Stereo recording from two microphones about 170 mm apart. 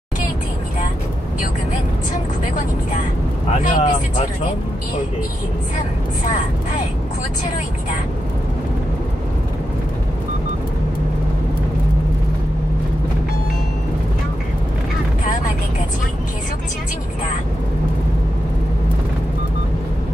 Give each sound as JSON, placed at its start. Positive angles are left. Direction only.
{"t": 3.6, "sound": "speech", "side_deg": 50}